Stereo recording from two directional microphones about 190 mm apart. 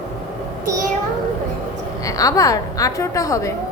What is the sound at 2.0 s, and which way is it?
A woman's voice, 20° left (ahead or behind).